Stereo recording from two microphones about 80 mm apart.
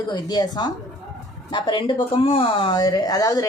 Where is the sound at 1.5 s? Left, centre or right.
Left.